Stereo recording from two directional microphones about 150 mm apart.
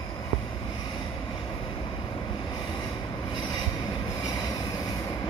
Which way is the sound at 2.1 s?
30° left (ahead or behind).